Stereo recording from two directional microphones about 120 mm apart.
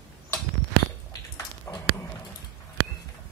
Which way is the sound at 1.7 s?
20° left (ahead or behind).